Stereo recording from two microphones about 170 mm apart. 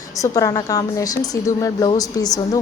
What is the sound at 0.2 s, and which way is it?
A woman's voice, 20° left (ahead or behind).